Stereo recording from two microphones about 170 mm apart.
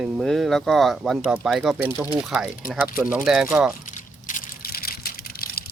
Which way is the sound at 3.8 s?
50° left (ahead or behind).